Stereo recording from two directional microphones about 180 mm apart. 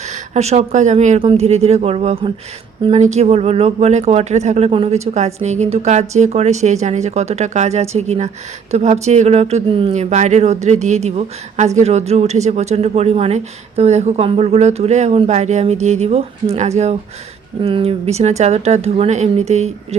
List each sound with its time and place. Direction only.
0.1 s speech: 40° right (ahead or behind)